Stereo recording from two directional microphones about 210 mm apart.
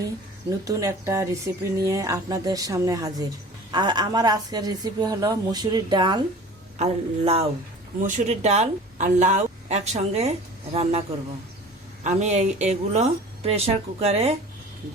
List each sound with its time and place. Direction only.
0.6 s a woman's voice: 15° right (ahead or behind)
12.0 s speech: 35° right (ahead or behind)